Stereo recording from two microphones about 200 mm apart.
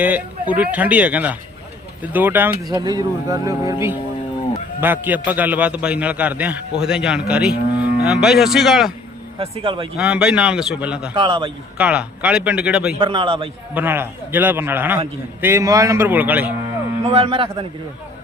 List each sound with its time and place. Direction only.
0.5 s a man's voice: 5° right (ahead or behind)
9.4 s speech: 30° right (ahead or behind)
10.0 s speech: 5° right (ahead or behind)
11.1 s speech: 25° right (ahead or behind)
11.8 s speech: 5° right (ahead or behind)
13.0 s speech: 25° right (ahead or behind)
13.7 s a man's voice: 10° right (ahead or behind)
17.1 s speech: 30° right (ahead or behind)